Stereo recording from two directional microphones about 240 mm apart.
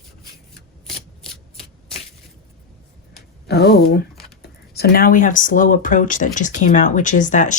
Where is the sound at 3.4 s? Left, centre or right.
Left.